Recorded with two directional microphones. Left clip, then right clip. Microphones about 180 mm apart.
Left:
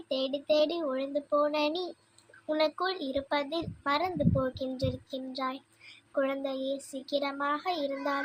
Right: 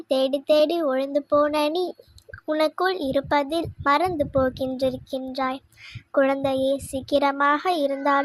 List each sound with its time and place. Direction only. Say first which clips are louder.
0.1 s a child's voice: right 9 dB; 35° right (ahead or behind)